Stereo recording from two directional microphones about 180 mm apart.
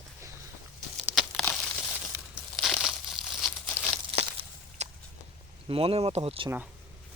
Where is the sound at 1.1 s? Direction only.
Centre (ahead or behind).